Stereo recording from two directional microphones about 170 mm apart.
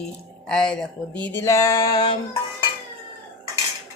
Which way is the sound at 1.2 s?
15° left (ahead or behind).